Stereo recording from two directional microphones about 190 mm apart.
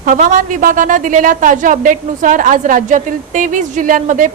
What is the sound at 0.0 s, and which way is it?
A woman's voice, 45° right (ahead or behind).